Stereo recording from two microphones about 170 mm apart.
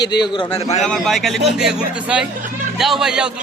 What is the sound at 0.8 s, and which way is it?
Speech, centre (ahead or behind).